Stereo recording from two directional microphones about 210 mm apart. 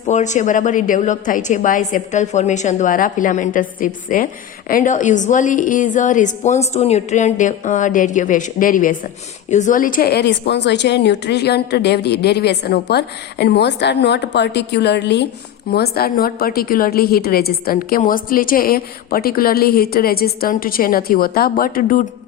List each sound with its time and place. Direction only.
0.0 s a woman's voice: 35° left (ahead or behind)